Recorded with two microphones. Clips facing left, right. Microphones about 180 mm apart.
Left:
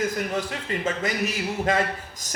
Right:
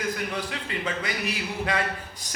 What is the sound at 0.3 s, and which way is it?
A man's voice, 45° left (ahead or behind).